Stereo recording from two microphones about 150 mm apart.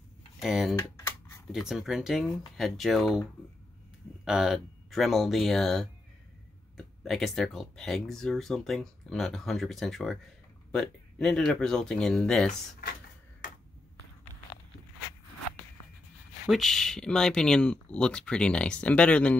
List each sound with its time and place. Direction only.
0.4 s speech: 5° right (ahead or behind)
0.9 s a sound: 20° left (ahead or behind)
1.5 s speech: 5° right (ahead or behind)
7.0 s speech: centre (ahead or behind)
16.4 s speech: centre (ahead or behind)